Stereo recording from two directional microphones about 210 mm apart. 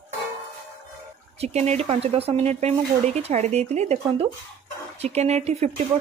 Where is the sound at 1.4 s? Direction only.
30° right (ahead or behind).